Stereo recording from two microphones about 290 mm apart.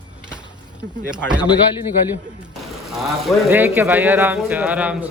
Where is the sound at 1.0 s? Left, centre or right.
Centre.